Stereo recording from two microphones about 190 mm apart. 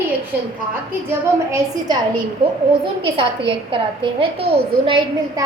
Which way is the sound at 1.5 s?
20° right (ahead or behind).